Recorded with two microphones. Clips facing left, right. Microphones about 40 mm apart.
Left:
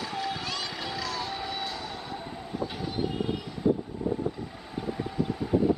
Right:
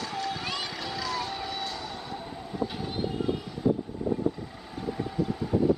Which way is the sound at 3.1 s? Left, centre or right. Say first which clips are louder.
Right 4 dB; centre.